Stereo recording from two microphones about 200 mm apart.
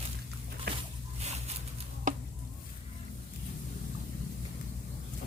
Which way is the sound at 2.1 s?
40° right (ahead or behind).